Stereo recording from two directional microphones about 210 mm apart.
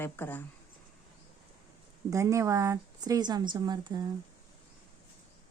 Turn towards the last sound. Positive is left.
turn(degrees=-20)  # may be behind; listen again after turning